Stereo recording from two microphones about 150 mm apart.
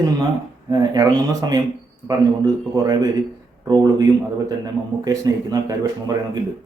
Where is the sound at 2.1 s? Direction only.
25° right (ahead or behind).